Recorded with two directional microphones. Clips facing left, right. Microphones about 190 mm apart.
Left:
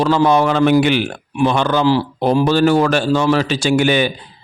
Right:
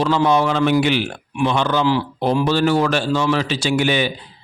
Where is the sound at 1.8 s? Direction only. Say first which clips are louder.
Left 3 dB; 35° left (ahead or behind).